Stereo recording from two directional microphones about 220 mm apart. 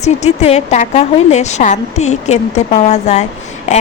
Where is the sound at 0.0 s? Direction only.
30° left (ahead or behind).